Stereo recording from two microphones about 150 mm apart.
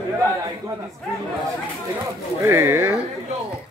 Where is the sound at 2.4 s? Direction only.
20° right (ahead or behind).